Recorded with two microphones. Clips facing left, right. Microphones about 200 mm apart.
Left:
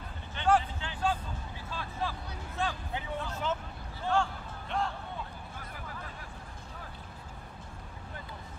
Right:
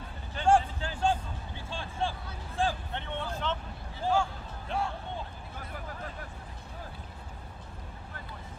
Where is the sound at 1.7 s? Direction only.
30° right (ahead or behind).